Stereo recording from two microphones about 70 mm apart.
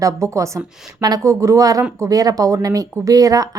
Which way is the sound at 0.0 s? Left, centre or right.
Right.